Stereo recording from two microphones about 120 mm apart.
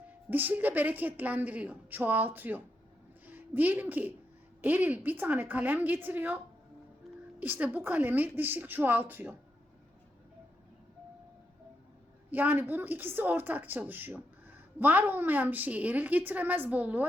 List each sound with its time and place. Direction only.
0.3 s a woman's voice: 15° right (ahead or behind)
12.3 s a woman's voice: 15° right (ahead or behind)